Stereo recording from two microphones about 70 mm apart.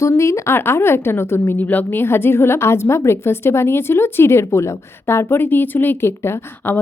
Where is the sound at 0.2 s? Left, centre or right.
Left.